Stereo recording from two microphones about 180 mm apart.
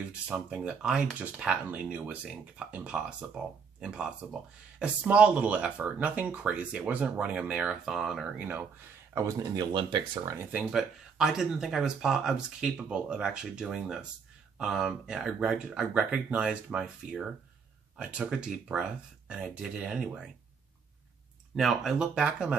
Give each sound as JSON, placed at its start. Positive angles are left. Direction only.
{"t": 0.1, "sound": "speech", "side_deg": -5}
{"t": 10.3, "sound": "speech", "side_deg": -10}
{"t": 21.5, "sound": "speech", "side_deg": 0}